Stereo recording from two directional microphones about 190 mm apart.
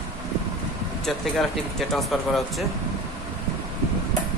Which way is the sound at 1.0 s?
Centre (ahead or behind).